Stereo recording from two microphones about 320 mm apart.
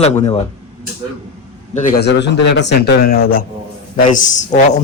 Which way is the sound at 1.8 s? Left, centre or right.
Left.